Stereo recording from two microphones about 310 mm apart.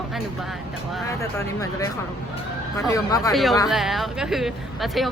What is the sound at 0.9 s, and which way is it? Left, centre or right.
Speech, centre.